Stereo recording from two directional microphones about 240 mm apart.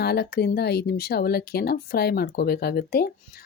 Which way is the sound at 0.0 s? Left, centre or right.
Left.